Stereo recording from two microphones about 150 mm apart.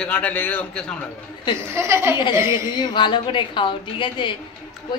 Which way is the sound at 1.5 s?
15° right (ahead or behind).